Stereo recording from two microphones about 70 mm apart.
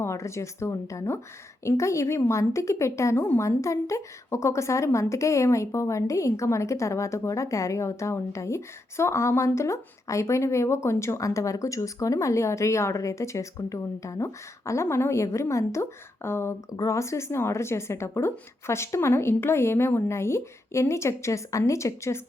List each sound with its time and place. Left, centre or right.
0.0 s a woman's voice: left